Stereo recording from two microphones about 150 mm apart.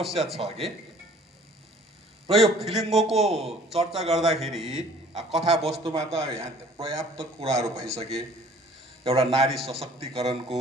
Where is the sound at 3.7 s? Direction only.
45° right (ahead or behind).